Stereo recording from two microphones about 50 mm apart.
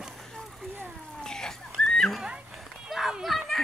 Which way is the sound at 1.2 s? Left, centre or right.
Centre.